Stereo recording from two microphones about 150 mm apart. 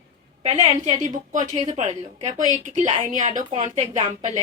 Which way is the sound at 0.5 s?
55° right (ahead or behind).